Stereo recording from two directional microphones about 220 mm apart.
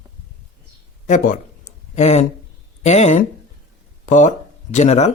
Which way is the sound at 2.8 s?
30° left (ahead or behind).